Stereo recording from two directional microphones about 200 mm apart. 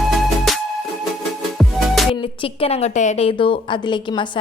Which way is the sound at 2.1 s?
25° left (ahead or behind).